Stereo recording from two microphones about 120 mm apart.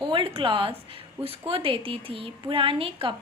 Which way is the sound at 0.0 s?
45° right (ahead or behind).